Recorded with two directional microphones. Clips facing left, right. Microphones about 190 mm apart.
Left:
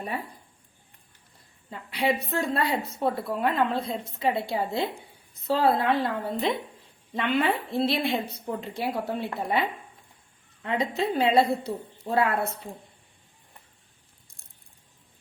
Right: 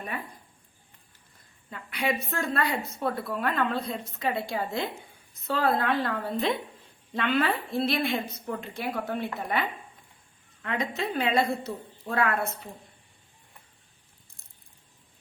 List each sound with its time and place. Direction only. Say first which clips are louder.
1.7 s a woman's voice: left 3 dB; 25° left (ahead or behind)